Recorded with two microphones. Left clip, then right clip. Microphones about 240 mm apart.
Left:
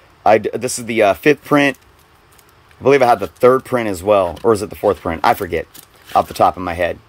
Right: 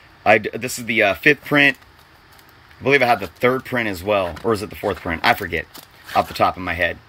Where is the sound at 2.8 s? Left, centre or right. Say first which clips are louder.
Left 4 dB; centre.